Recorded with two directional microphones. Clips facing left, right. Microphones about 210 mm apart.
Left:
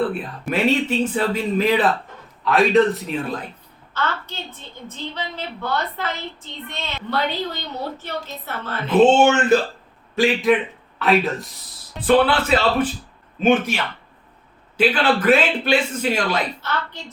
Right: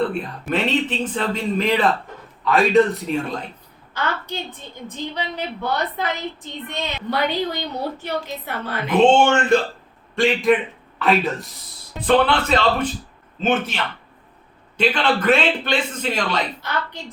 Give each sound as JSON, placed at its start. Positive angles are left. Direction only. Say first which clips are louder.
{"t": 0.0, "sound": "speech", "louder": "even", "side_deg": 5}
{"t": 3.9, "sound": "a woman's voice", "louder": "right 1 dB", "side_deg": -15}
{"t": 9.0, "sound": "a man's voice", "louder": "left 1 dB", "side_deg": 5}
{"t": 16.6, "sound": "a woman's voice", "louder": "even", "side_deg": -15}